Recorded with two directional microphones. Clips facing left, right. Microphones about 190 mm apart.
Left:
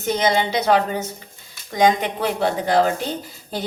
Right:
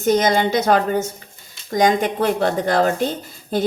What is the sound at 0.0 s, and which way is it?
Speech, 45° right (ahead or behind).